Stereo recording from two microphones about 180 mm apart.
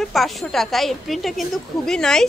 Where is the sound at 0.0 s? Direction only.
Centre (ahead or behind).